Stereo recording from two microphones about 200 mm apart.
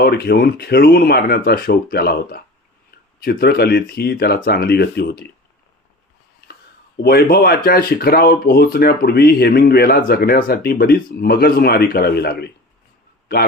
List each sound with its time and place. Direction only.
0.0 s speech: 50° left (ahead or behind)
6.5 s speech: 50° left (ahead or behind)